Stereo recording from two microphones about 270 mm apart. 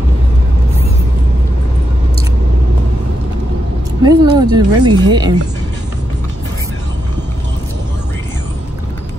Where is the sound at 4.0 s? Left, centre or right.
Centre.